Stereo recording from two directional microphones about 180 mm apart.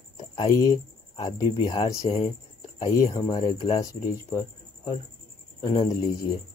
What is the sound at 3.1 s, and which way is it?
Speech, 20° left (ahead or behind).